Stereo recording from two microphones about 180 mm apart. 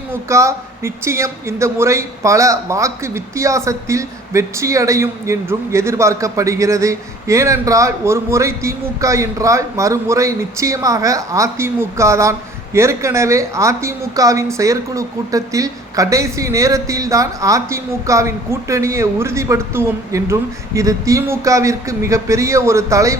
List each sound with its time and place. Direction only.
0.1 s a woman's voice: 15° right (ahead or behind)